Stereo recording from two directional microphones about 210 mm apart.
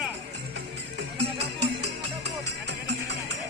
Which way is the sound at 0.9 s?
55° right (ahead or behind).